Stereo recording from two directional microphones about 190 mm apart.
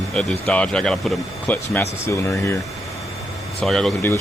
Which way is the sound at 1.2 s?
15° left (ahead or behind).